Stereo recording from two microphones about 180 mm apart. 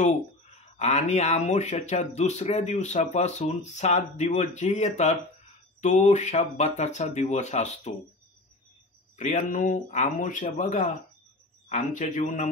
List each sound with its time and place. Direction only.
0.7 s speech: 40° left (ahead or behind)
9.2 s speech: 45° left (ahead or behind)